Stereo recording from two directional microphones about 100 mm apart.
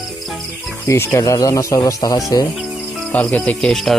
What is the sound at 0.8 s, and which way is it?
Speech, 25° left (ahead or behind).